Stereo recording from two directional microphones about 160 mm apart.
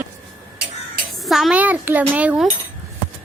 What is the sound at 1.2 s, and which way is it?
A child's voice, centre (ahead or behind).